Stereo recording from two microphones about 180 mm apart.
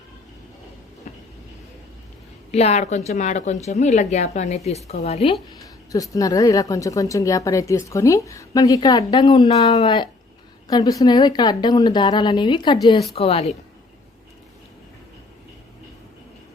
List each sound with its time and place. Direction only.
1.1 s vehicle: 45° left (ahead or behind)
2.5 s a woman's voice: 35° left (ahead or behind)
5.6 s a woman's voice: 20° left (ahead or behind); by 13.6 s 35° left (ahead or behind)